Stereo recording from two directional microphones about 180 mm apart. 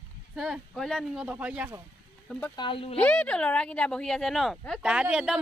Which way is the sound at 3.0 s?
5° left (ahead or behind).